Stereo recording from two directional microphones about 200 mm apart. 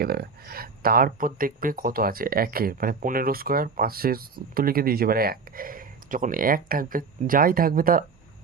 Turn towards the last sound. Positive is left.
turn(degrees=-45)  # may be behind; listen again after turning